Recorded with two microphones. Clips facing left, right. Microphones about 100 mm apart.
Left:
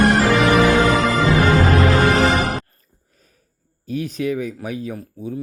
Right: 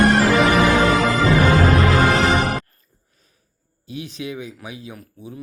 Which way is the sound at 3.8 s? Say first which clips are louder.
Left 8 dB; 45° left (ahead or behind).